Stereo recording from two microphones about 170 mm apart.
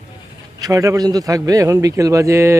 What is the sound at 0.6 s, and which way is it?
A man's voice, 20° right (ahead or behind).